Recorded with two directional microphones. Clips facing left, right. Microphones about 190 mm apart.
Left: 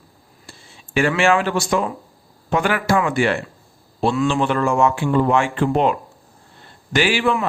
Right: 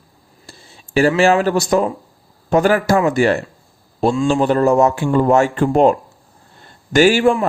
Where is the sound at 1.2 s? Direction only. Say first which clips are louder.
Right 4 dB; 40° right (ahead or behind).